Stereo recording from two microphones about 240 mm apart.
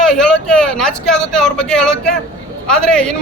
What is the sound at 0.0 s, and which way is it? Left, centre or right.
A man's voice, centre.